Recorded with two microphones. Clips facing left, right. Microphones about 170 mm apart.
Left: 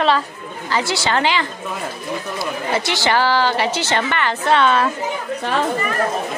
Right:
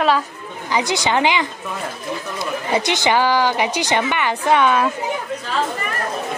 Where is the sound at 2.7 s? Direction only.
15° right (ahead or behind).